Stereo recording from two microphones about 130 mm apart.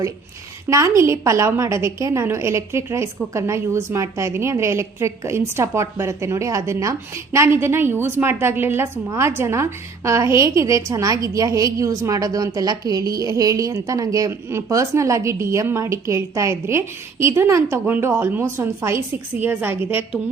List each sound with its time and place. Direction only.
0.9 s a woman's voice: 20° right (ahead or behind)